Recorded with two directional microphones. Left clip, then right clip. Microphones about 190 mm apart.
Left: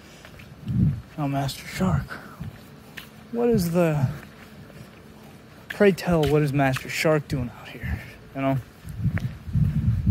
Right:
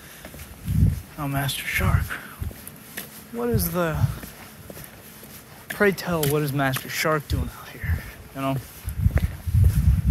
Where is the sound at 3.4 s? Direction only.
35° left (ahead or behind).